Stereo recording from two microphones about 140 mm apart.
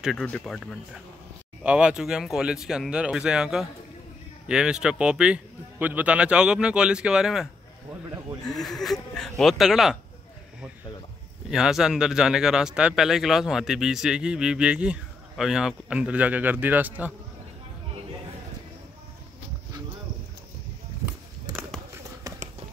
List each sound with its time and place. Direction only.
0.0 s speech: centre (ahead or behind)
0.3 s speech: 10° left (ahead or behind)
1.6 s a man's voice: 10° right (ahead or behind)
8.5 s speech: 5° left (ahead or behind)
11.5 s speech: 5° right (ahead or behind)
22.3 s clip-clop: 25° right (ahead or behind)